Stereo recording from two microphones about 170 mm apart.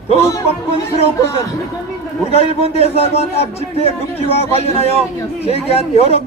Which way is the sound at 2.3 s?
35° left (ahead or behind).